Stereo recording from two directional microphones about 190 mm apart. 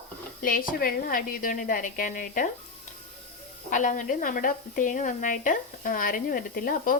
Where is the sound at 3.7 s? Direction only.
45° left (ahead or behind).